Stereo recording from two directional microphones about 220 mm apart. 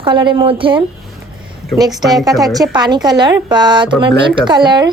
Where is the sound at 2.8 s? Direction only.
20° right (ahead or behind).